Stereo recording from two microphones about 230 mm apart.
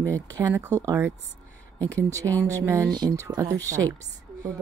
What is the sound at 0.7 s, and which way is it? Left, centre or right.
Speech, centre.